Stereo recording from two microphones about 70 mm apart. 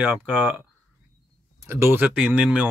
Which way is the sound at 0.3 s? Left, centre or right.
Right.